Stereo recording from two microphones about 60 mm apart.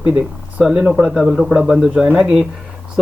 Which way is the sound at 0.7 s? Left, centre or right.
Centre.